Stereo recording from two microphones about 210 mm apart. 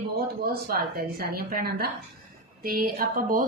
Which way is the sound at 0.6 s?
45° right (ahead or behind).